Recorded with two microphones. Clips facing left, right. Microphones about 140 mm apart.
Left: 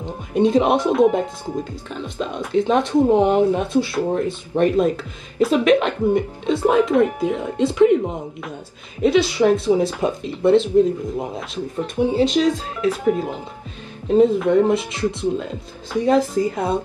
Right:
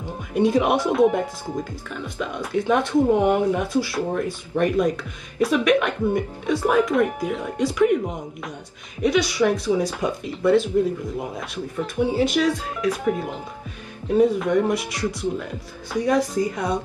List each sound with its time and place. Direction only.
0.0 s music: 20° left (ahead or behind)
1.1 s speech: 25° left (ahead or behind)
12.9 s speech: centre (ahead or behind)
14.0 s speech: 25° left (ahead or behind)